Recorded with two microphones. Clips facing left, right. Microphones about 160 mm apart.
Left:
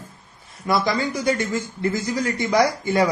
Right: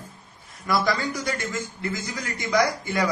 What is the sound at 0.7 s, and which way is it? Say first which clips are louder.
Speech: left 3 dB; 25° left (ahead or behind).